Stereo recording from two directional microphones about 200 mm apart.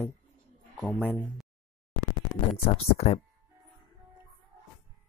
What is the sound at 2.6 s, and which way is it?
Speech, 30° left (ahead or behind).